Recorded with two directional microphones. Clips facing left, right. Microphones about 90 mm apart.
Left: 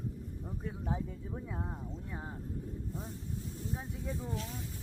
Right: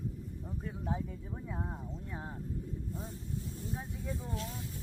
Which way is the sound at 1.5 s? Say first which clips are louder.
Right 3 dB; 5° right (ahead or behind).